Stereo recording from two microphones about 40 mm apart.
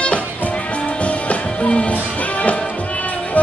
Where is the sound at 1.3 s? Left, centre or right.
Left.